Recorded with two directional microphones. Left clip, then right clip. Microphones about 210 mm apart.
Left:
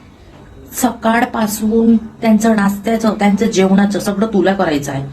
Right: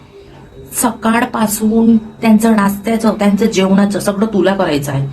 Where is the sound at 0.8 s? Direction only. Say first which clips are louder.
Even; 10° right (ahead or behind).